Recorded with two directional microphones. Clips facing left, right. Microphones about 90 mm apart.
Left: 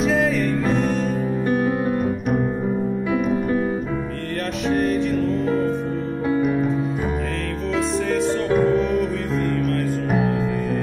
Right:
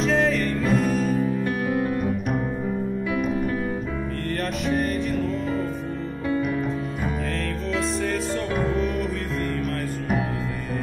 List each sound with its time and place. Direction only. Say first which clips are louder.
0.0 s music: left 2 dB; centre (ahead or behind)
1.5 s music: left 4 dB; 25° left (ahead or behind)
4.6 s music: left 5 dB; centre (ahead or behind)
8.1 s music: left 6 dB; centre (ahead or behind)